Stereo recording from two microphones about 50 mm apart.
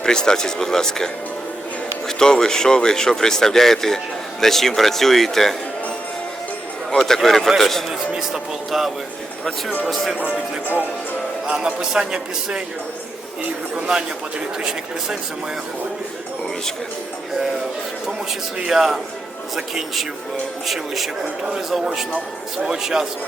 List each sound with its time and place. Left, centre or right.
0.0 s speech: centre
6.9 s speech: centre
8.1 s a man's voice: centre
11.5 s a man's voice: centre
14.6 s a man's voice: centre
18.7 s a man's voice: centre
22.6 s a man's voice: centre